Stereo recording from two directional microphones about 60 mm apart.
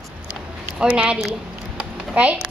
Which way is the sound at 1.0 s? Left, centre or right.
Centre.